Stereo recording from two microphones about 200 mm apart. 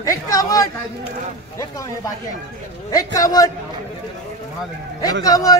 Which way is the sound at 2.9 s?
15° left (ahead or behind).